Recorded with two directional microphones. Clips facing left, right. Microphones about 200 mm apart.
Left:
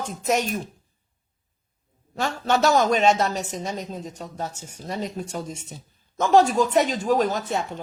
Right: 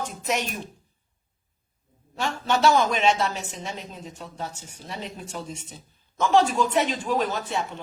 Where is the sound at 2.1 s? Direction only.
40° left (ahead or behind).